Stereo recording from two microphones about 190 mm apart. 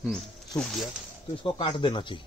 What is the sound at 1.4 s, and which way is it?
Speech, 25° left (ahead or behind).